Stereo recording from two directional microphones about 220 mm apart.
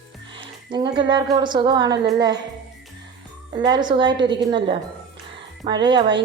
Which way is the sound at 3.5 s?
20° right (ahead or behind).